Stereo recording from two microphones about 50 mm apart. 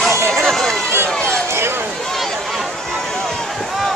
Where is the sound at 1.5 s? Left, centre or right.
Right.